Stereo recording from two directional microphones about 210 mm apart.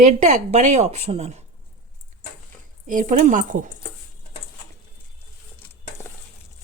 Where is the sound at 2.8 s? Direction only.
40° right (ahead or behind).